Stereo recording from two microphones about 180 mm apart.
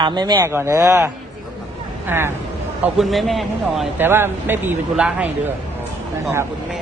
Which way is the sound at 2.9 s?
Centre (ahead or behind).